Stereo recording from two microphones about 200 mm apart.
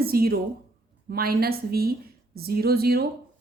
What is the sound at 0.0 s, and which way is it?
A woman's voice, 50° right (ahead or behind).